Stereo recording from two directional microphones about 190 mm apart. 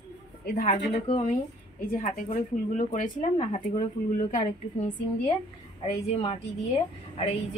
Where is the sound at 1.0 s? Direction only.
30° left (ahead or behind).